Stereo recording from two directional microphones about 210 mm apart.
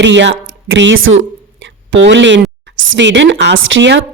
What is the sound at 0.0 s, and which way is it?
Speech, 60° right (ahead or behind).